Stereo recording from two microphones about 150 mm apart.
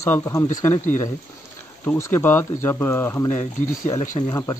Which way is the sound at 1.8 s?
15° left (ahead or behind).